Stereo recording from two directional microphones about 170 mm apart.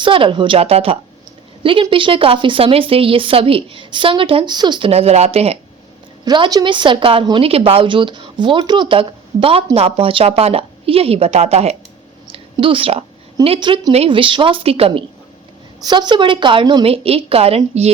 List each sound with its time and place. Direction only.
0.0 s a woman's voice: 30° right (ahead or behind)
6.2 s a woman's voice: 25° right (ahead or behind)